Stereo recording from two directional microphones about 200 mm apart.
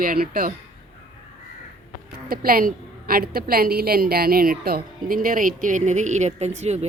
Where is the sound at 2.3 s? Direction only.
45° right (ahead or behind).